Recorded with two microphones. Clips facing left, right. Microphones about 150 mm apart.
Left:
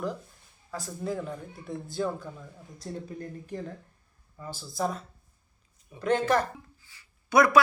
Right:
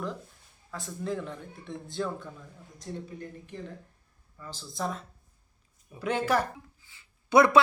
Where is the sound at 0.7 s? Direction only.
5° left (ahead or behind).